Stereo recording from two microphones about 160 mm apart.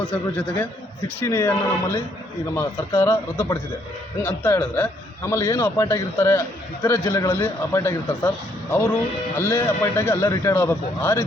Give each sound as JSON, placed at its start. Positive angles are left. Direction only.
{"t": 0.1, "sound": "a man's voice", "side_deg": 10}
{"t": 9.4, "sound": "a man's voice", "side_deg": 15}